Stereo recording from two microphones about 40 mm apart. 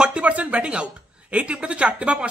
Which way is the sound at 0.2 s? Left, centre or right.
Right.